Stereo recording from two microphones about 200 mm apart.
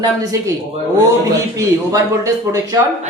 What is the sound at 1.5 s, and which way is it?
Speech, 15° right (ahead or behind).